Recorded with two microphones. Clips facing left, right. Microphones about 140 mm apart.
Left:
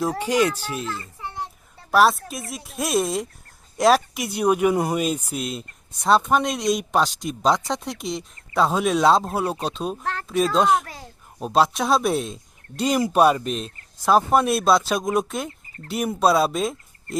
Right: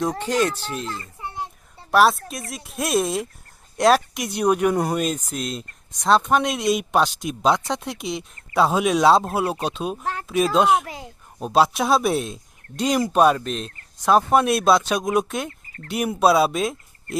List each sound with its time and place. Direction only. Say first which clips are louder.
0.0 s a child's voice: left 1 dB; 10° left (ahead or behind)
1.9 s speech: right 1 dB; centre (ahead or behind)
10.8 s a child's voice: right 4 dB; 15° right (ahead or behind)
11.3 s speech: right 1 dB; centre (ahead or behind)